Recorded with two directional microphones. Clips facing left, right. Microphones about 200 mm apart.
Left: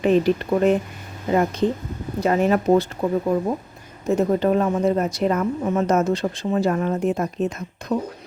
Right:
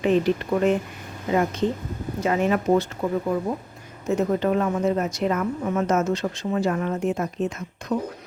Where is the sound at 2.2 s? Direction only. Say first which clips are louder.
Left 3 dB; 40° left (ahead or behind).